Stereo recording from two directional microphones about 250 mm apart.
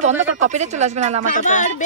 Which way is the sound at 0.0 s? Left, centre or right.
Right.